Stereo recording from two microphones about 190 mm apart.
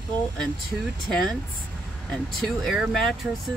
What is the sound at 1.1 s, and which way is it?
Speech, 5° left (ahead or behind).